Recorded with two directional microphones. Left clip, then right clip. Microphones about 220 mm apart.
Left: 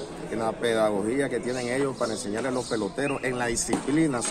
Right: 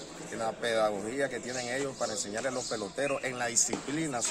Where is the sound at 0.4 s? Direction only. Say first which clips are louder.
Left 5 dB; 20° right (ahead or behind).